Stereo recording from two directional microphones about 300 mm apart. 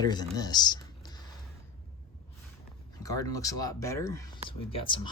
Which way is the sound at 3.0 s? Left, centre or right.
Centre.